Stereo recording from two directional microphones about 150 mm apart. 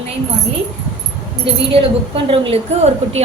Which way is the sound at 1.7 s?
40° right (ahead or behind).